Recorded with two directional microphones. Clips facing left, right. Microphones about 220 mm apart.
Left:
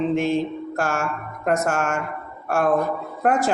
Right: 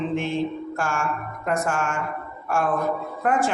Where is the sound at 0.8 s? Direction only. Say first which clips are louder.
Left 3 dB; 40° left (ahead or behind).